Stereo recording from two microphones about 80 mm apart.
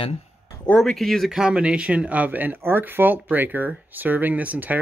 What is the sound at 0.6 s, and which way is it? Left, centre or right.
Speech, centre.